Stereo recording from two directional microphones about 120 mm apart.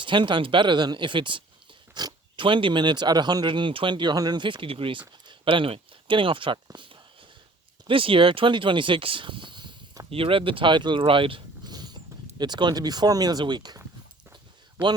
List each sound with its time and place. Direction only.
0.0 s speech: 40° right (ahead or behind)
10.1 s speech: 50° right (ahead or behind)